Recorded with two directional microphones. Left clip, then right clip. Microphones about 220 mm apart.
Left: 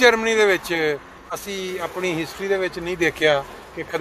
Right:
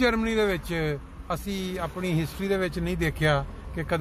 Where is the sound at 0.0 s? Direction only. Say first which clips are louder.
Left 9 dB; 10° left (ahead or behind).